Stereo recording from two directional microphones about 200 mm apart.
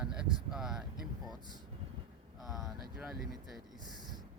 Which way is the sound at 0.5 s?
Centre (ahead or behind).